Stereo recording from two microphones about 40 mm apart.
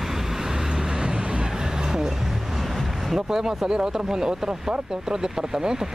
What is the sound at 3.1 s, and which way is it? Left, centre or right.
Speech, centre.